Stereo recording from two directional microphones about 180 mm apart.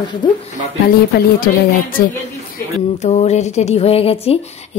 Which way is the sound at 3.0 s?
40° left (ahead or behind).